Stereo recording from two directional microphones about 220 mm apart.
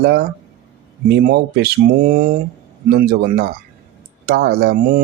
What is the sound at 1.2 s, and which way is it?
Speech, 45° right (ahead or behind).